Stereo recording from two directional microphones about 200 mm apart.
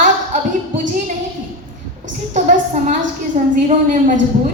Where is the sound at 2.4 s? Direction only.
40° right (ahead or behind).